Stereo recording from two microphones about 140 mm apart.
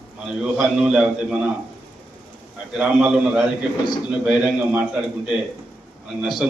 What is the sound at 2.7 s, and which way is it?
A man's voice, 5° right (ahead or behind).